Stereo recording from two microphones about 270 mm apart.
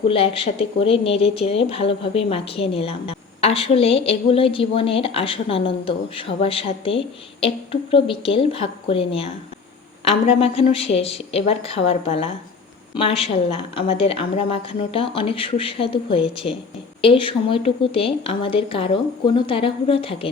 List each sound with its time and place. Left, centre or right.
0.1 s speech: left